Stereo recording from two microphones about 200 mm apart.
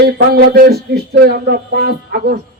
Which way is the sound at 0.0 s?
50° right (ahead or behind).